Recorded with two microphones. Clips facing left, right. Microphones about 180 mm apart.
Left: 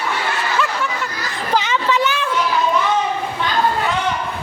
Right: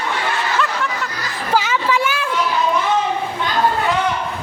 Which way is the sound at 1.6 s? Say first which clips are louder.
Left 1 dB; 5° right (ahead or behind).